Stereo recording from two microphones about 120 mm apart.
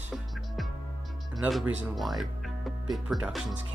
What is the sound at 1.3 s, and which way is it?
Speech, centre (ahead or behind).